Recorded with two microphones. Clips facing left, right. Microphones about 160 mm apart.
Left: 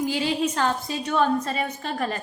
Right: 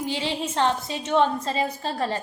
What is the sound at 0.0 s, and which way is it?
A woman's voice, 25° right (ahead or behind).